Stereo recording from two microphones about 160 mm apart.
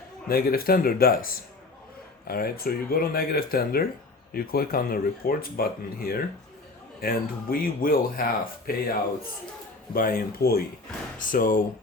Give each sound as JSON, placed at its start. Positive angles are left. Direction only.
{"t": 0.3, "sound": "speech", "side_deg": 70}
{"t": 9.9, "sound": "speech", "side_deg": 65}
{"t": 11.2, "sound": "speech", "side_deg": 55}